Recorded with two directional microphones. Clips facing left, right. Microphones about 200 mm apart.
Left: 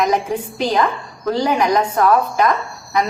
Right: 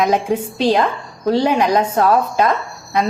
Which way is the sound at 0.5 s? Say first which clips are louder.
Right 2 dB; 30° right (ahead or behind).